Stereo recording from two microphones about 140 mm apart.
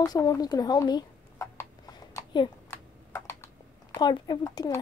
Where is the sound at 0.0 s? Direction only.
30° left (ahead or behind).